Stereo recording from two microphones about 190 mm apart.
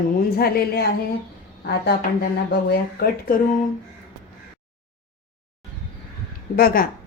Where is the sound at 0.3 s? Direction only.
55° left (ahead or behind).